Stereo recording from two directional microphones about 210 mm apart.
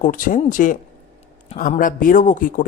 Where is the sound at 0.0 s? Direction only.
40° left (ahead or behind).